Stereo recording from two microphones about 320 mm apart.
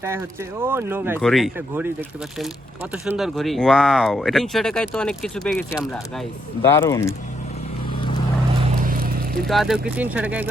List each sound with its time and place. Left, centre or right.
0.6 s speech: centre
8.8 s a sound: right
9.5 s speech: centre